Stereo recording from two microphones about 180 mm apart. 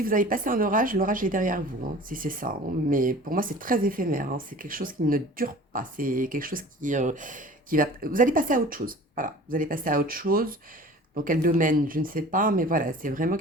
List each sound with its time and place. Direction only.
0.0 s speech: 50° right (ahead or behind)